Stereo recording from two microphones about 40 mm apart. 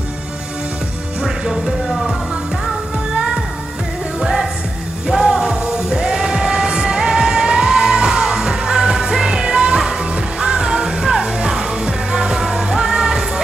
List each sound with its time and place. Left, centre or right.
1.9 s music: centre
4.2 s music: centre